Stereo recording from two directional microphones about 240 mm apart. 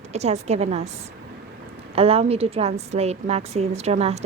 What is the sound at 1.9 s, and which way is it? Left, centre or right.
A woman's voice, right.